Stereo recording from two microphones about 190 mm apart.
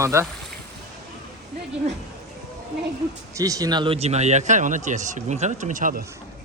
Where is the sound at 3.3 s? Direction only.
20° right (ahead or behind); by 6.0 s 45° right (ahead or behind).